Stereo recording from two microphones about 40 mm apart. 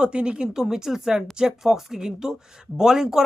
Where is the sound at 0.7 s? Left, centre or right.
Centre.